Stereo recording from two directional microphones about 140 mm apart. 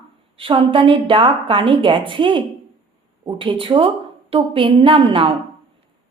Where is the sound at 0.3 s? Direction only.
40° right (ahead or behind).